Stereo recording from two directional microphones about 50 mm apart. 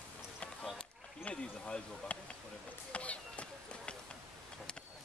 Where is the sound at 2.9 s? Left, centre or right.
Left.